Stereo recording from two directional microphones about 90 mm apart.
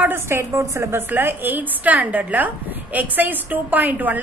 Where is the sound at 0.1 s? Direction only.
30° right (ahead or behind).